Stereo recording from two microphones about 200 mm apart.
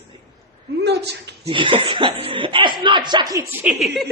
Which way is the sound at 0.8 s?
55° right (ahead or behind).